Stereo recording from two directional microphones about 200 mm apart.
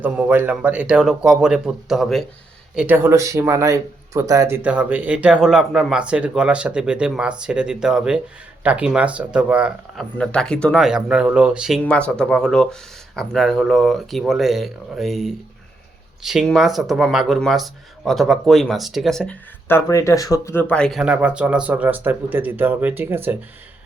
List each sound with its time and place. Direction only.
0.0 s speech: 10° right (ahead or behind)